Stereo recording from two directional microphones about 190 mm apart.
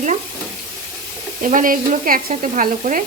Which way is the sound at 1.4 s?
45° right (ahead or behind).